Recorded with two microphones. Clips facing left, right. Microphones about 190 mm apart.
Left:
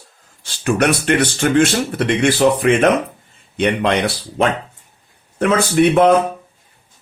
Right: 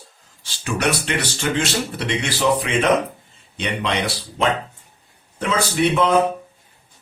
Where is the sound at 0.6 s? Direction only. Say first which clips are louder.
Left 6 dB; 55° left (ahead or behind).